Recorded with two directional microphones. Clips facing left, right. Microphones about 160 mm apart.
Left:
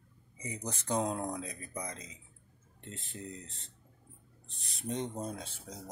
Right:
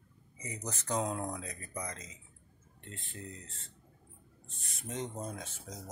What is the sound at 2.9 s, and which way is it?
Speech, 40° left (ahead or behind).